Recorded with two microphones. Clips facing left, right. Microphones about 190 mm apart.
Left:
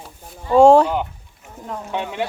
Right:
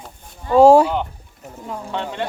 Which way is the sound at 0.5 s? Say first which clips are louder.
Even; 5° right (ahead or behind).